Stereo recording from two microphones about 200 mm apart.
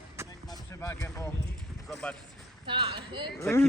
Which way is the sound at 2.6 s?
25° right (ahead or behind).